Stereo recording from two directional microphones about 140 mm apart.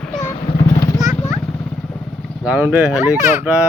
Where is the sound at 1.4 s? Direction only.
15° left (ahead or behind).